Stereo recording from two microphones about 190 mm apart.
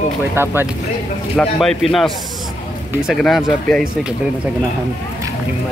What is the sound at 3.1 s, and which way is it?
Speech, centre (ahead or behind).